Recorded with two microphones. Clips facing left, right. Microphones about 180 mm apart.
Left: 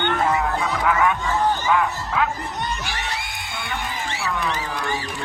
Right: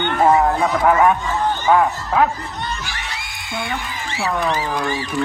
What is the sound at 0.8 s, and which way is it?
Speech, 40° right (ahead or behind).